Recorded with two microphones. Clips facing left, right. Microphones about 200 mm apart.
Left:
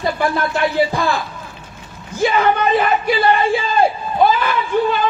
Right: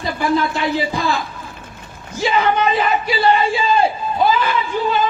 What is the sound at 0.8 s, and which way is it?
A man's voice, 55° left (ahead or behind).